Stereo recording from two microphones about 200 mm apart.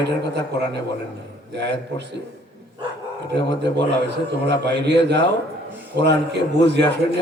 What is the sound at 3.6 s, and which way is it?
A man's voice, 60° right (ahead or behind).